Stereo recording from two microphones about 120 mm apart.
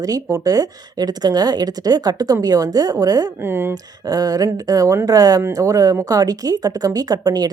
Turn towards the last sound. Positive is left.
turn(degrees=-35)  # may be behind; listen again after turning